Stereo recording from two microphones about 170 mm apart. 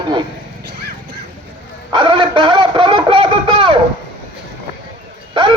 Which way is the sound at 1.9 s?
30° right (ahead or behind).